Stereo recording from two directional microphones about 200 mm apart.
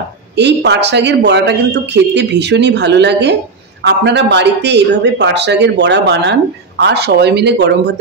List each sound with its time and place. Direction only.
0.4 s speech: 60° right (ahead or behind)